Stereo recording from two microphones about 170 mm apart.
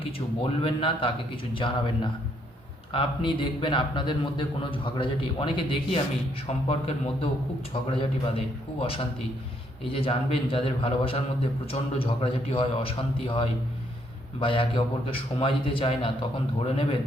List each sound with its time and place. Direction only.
0.0 s a man's voice: 35° left (ahead or behind)
2.9 s a man's voice: 30° left (ahead or behind)